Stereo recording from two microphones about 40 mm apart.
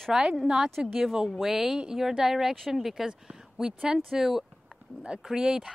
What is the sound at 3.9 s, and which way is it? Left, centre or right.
Speech, centre.